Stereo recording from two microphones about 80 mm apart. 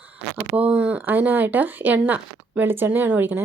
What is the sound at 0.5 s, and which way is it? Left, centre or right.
Speech, centre.